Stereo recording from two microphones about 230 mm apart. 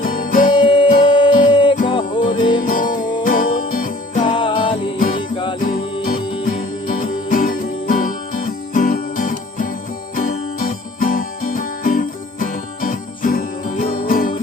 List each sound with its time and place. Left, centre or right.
0.0 s music: left
0.5 s music: left
1.0 s a sound: left
1.5 s music: left
2.6 s music: left
4.2 s music: left
4.9 s music: left